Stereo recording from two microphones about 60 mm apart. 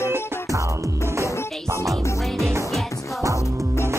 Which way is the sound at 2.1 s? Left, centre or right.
Centre.